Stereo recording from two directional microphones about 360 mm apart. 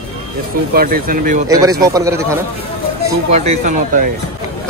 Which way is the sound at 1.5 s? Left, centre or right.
Centre.